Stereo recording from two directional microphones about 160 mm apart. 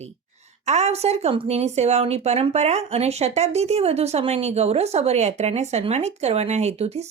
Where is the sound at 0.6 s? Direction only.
45° right (ahead or behind).